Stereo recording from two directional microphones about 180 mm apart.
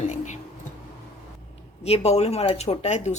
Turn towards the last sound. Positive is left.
turn(degrees=40)  # may be behind; listen again after turning